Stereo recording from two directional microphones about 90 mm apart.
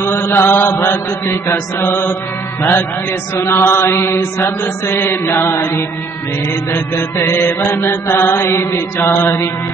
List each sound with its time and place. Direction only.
0.0 s mantra: 30° left (ahead or behind)